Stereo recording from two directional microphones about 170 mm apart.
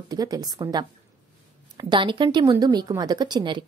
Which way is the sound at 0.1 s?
20° right (ahead or behind).